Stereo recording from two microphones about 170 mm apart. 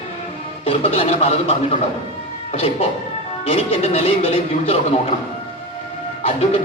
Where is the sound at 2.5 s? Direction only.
35° left (ahead or behind).